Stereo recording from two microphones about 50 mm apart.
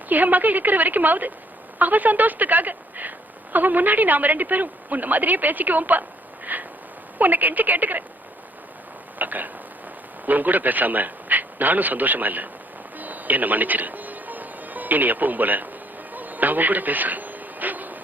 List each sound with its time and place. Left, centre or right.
0.1 s speech: right
9.1 s speech: right
13.0 s music: right
16.1 s a sound: right